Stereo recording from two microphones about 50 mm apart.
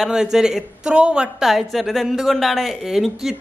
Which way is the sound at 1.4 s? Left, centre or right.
Centre.